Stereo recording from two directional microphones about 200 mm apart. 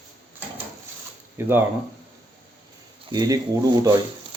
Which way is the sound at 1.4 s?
10° right (ahead or behind).